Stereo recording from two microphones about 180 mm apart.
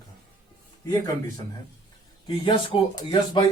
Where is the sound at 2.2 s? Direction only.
25° left (ahead or behind).